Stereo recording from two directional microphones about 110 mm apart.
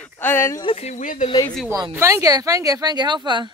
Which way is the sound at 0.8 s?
90° left.